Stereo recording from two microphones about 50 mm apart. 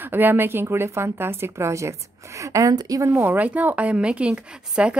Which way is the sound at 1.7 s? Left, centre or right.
Right.